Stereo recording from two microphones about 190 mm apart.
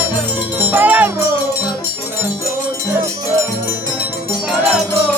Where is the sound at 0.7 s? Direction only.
10° right (ahead or behind).